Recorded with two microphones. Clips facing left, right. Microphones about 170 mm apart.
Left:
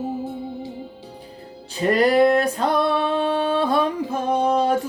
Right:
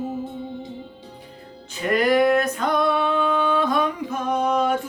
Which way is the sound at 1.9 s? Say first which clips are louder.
Left 2 dB; 35° left (ahead or behind).